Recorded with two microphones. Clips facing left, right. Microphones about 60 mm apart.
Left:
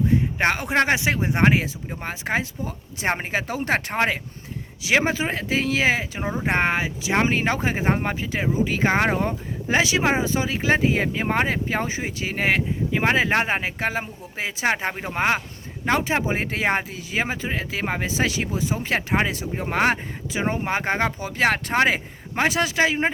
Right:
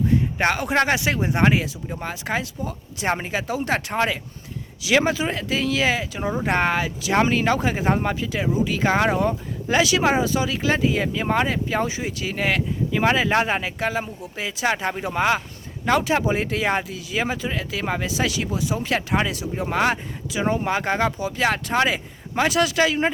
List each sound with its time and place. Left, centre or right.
0.3 s speech: left